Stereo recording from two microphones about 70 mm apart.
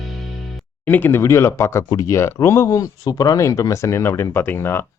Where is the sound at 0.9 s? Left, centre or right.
Left.